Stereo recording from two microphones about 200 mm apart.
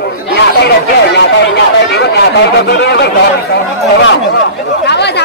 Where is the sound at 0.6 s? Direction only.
55° left (ahead or behind).